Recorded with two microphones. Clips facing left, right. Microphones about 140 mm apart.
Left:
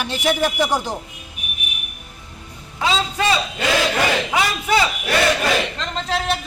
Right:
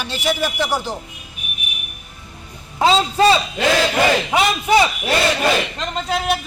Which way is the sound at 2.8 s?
35° right (ahead or behind).